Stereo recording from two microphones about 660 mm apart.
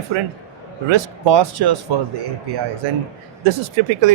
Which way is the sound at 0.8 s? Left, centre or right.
Right.